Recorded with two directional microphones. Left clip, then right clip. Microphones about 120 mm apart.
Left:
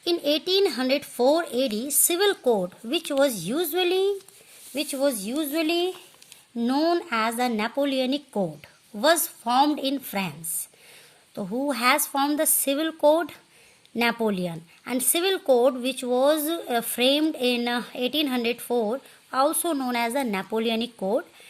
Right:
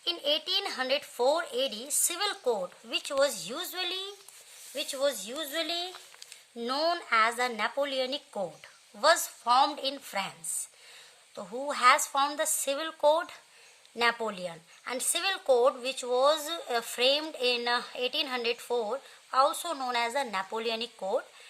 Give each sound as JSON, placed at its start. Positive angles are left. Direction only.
{"t": 0.0, "sound": "a woman's voice", "side_deg": 50}
{"t": 6.6, "sound": "a woman's voice", "side_deg": 25}
{"t": 11.3, "sound": "a woman's voice", "side_deg": 40}